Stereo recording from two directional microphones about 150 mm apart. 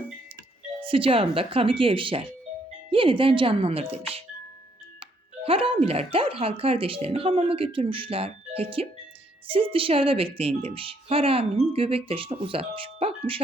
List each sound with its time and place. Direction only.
0.8 s speech: 35° right (ahead or behind)